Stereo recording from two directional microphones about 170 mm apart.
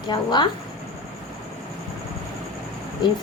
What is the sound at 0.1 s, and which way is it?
Speech, 25° left (ahead or behind).